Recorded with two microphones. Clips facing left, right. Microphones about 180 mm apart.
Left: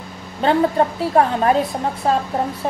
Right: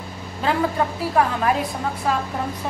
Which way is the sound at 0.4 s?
35° left (ahead or behind).